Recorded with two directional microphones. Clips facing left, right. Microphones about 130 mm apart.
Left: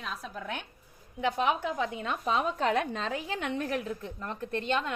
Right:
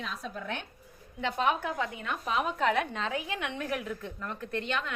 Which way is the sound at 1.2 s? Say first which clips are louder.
Left 1 dB; 15° left (ahead or behind).